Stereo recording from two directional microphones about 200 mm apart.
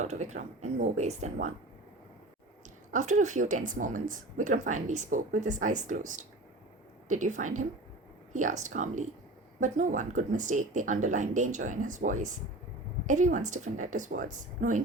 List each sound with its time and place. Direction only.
0.0 s speech: 35° right (ahead or behind)
2.9 s speech: 40° right (ahead or behind)